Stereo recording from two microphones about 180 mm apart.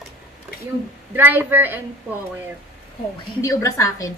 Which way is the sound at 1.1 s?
10° right (ahead or behind).